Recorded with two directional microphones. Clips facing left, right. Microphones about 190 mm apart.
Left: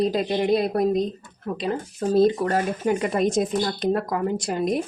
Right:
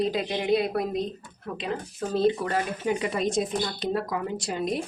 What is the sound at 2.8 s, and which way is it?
Speech, 50° left (ahead or behind).